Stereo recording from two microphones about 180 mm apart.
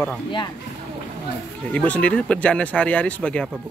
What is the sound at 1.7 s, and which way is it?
Speech, 5° left (ahead or behind).